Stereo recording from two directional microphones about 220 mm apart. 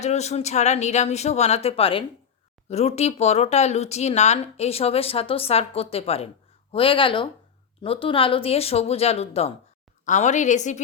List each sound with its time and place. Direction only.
0.0 s a woman's voice: 30° left (ahead or behind)